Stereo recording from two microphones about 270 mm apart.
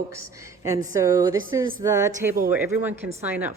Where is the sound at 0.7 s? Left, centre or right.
Centre.